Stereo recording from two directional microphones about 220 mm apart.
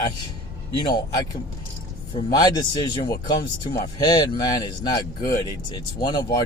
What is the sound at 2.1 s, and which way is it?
A man's voice, 20° left (ahead or behind).